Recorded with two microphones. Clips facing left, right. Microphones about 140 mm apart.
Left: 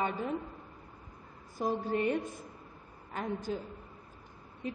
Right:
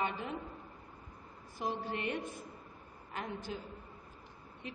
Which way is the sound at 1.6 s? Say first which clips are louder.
Left 6 dB; 45° left (ahead or behind).